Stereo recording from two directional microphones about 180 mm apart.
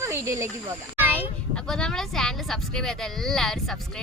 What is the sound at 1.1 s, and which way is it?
Speech, 5° left (ahead or behind).